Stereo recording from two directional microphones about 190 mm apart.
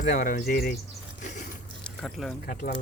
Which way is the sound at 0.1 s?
45° left (ahead or behind).